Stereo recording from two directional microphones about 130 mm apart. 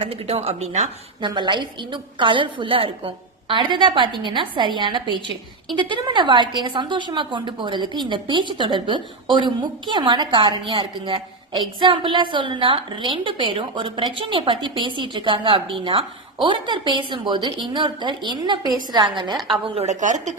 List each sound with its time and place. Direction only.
0.0 s speech: 50° right (ahead or behind)
1.2 s a woman's voice: 35° right (ahead or behind)
19.6 s speech: 50° right (ahead or behind); by 20.3 s 70° right (ahead or behind)